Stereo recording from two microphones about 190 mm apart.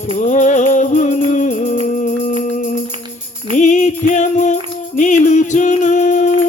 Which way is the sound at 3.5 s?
40° left (ahead or behind).